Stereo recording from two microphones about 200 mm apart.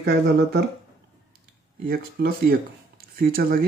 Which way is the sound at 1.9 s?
50° right (ahead or behind).